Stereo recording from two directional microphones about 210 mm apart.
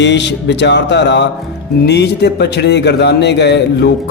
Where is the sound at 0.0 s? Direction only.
55° left (ahead or behind).